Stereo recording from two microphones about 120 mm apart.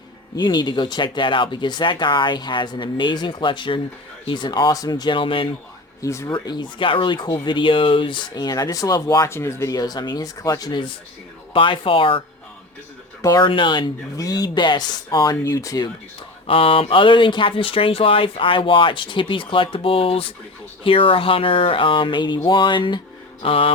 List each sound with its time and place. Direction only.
0.3 s speech: 35° left (ahead or behind)
6.0 s speech: 25° left (ahead or behind); by 12.2 s 45° left (ahead or behind)
13.4 s speech: 45° left (ahead or behind); by 15.9 s 30° left (ahead or behind)
16.5 s speech: 50° left (ahead or behind)